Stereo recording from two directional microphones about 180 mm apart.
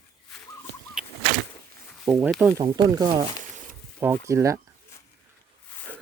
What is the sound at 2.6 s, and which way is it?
Speech, 20° right (ahead or behind).